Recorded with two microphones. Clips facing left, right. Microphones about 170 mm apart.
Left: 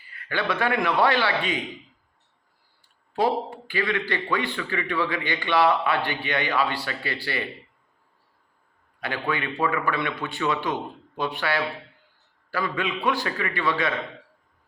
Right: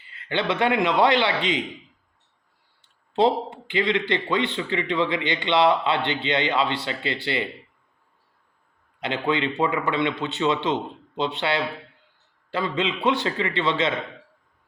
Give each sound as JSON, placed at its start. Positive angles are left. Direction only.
{"t": 0.0, "sound": "a man's voice", "side_deg": -25}
{"t": 2.8, "sound": "a man's voice", "side_deg": -25}
{"t": 9.0, "sound": "a man's voice", "side_deg": -20}